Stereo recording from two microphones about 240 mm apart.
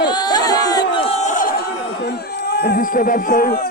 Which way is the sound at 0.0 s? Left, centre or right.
Centre.